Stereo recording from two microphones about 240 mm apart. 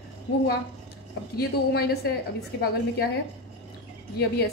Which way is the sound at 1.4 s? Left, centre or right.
Left.